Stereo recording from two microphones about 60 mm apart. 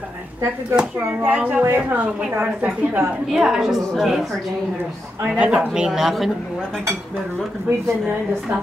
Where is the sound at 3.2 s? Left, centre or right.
Centre.